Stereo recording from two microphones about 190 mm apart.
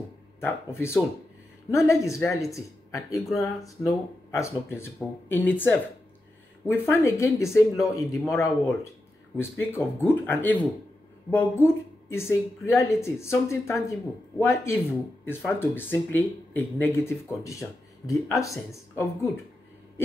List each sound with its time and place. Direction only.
0.7 s speech: 15° left (ahead or behind)